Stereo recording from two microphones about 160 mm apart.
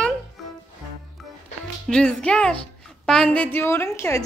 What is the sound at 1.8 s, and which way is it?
A woman's voice, 5° left (ahead or behind).